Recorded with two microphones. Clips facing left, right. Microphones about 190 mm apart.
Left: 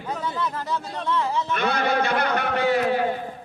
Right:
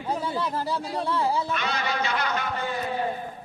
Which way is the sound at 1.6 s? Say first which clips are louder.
Left 6 dB; 55° left (ahead or behind).